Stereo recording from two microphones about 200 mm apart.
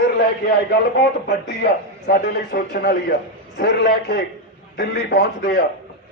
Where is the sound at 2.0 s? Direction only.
50° left (ahead or behind).